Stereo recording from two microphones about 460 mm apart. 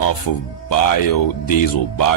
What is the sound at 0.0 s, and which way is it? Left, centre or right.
Speech, left.